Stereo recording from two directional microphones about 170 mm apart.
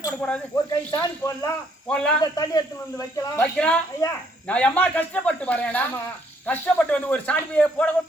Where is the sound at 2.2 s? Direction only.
20° left (ahead or behind).